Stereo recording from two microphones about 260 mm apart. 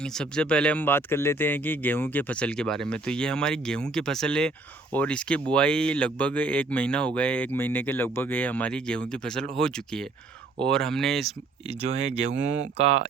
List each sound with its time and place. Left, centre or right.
0.0 s speech: centre
11.7 s speech: right